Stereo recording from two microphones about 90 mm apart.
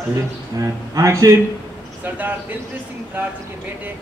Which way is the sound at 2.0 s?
20° right (ahead or behind).